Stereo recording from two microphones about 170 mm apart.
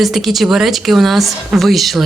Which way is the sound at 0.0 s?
Centre (ahead or behind).